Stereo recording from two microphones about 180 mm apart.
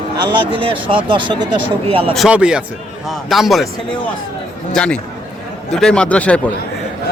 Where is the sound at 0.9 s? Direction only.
35° right (ahead or behind).